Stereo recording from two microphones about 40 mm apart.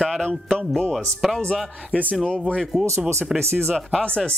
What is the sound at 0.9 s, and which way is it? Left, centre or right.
Speech, centre.